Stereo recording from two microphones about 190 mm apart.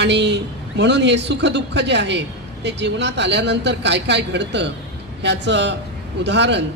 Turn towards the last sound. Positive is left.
turn(degrees=-65)  # may be behind; listen again after turning